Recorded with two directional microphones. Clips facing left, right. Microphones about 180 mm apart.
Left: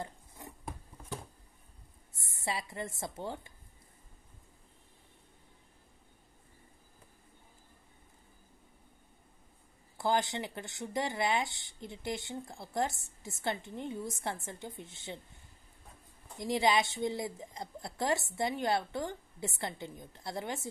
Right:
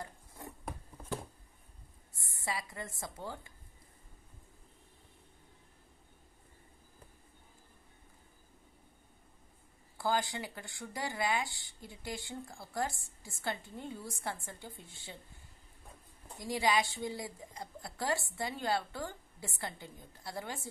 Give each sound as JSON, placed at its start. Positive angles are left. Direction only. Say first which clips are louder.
{"t": 0.0, "sound": "a sound", "louder": "left 3 dB", "side_deg": 20}
{"t": 2.1, "sound": "speech", "louder": "left 2 dB", "side_deg": 25}
{"t": 9.9, "sound": "speech", "louder": "left 2 dB", "side_deg": 25}
{"t": 16.4, "sound": "speech", "louder": "left 3 dB", "side_deg": 25}